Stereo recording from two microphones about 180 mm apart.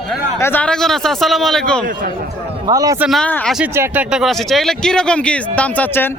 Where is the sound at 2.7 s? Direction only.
20° right (ahead or behind).